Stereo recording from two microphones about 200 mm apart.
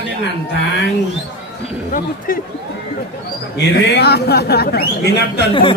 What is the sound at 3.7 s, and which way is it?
A man's voice, 55° left (ahead or behind).